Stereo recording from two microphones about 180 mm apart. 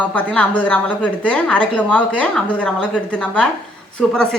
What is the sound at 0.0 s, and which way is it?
A woman's voice, 10° left (ahead or behind).